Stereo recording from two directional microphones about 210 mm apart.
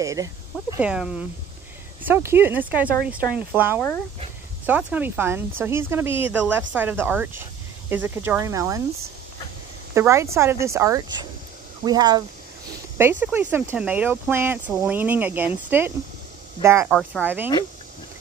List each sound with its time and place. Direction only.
0.0 s speech: 15° right (ahead or behind)
0.8 s speech: 5° right (ahead or behind)
9.9 s speech: 15° right (ahead or behind)
16.9 s speech: centre (ahead or behind)